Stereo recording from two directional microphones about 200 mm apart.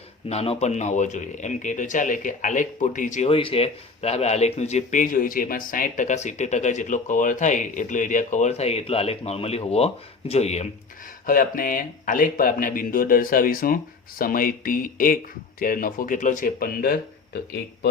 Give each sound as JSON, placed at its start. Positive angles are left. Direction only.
{"t": 0.3, "sound": "speech", "side_deg": 30}
{"t": 11.3, "sound": "speech", "side_deg": 45}